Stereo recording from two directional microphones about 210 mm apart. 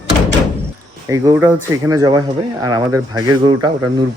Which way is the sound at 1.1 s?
10° right (ahead or behind).